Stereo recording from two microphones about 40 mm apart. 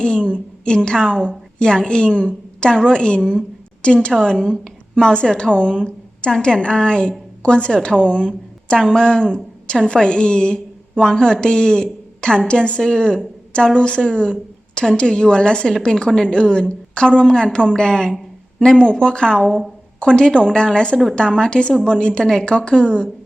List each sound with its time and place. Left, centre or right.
0.0 s a woman's voice: left
8.8 s speech: centre
9.0 s a woman's voice: left